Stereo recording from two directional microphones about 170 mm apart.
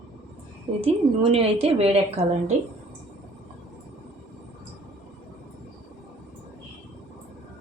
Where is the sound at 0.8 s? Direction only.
35° right (ahead or behind).